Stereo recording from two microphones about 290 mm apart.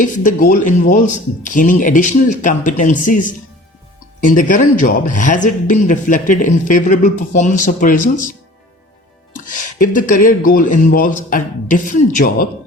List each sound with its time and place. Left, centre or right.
0.0 s speech: left
9.9 s speech: left